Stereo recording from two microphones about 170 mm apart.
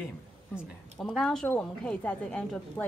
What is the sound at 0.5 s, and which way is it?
A woman's voice, centre (ahead or behind).